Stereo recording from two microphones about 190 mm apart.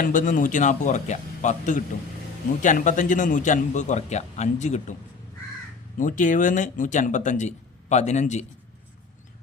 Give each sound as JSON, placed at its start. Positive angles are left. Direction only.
{"t": 0.0, "sound": "speech", "side_deg": 45}
{"t": 6.0, "sound": "speech", "side_deg": 45}